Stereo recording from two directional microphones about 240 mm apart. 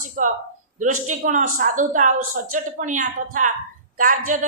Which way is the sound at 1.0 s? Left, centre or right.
Right.